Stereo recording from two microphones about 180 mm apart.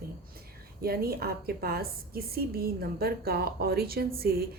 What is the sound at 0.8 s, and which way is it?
Speech, 60° right (ahead or behind).